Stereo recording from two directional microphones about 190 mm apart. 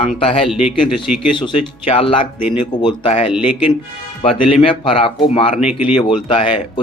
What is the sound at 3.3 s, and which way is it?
Speech, 5° right (ahead or behind).